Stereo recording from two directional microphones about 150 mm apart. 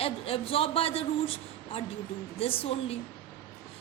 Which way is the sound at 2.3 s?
40° left (ahead or behind).